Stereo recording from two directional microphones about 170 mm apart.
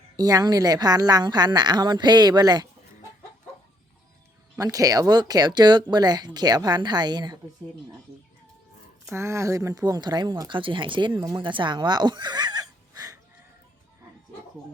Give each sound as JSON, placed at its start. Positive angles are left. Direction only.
{"t": 0.2, "sound": "a woman's voice", "side_deg": -20}
{"t": 4.5, "sound": "a woman's voice", "side_deg": -20}
{"t": 9.0, "sound": "a woman's voice", "side_deg": -15}
{"t": 11.1, "sound": "speech", "side_deg": -15}
{"t": 11.3, "sound": "speech", "side_deg": -30}